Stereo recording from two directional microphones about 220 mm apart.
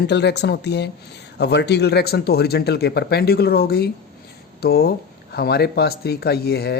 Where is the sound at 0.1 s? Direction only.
50° left (ahead or behind).